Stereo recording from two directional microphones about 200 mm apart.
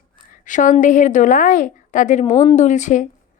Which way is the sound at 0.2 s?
40° left (ahead or behind).